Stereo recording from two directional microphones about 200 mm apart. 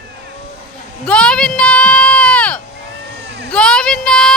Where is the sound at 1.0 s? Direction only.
5° left (ahead or behind).